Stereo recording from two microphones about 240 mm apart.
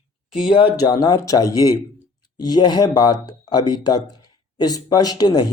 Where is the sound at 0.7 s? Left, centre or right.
Centre.